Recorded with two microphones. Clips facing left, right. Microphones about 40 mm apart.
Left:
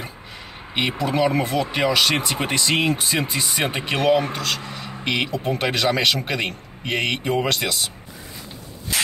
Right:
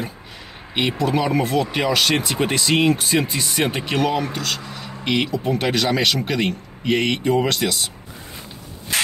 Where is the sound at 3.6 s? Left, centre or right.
Centre.